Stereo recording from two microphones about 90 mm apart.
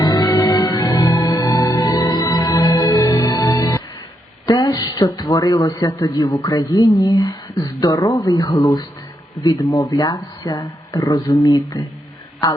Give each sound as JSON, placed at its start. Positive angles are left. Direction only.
{"t": 0.0, "sound": "music", "side_deg": 45}
{"t": 4.4, "sound": "speech", "side_deg": 45}